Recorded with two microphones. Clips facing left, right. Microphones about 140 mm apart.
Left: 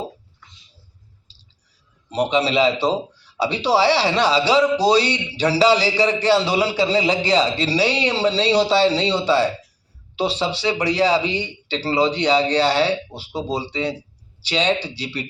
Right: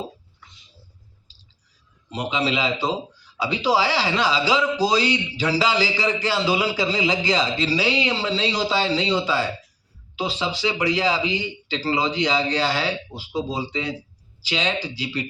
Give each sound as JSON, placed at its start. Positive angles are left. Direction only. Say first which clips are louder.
{"t": 2.0, "sound": "a man's voice", "louder": "left 5 dB", "side_deg": 35}
{"t": 14.9, "sound": "a man's voice", "louder": "right 1 dB", "side_deg": 30}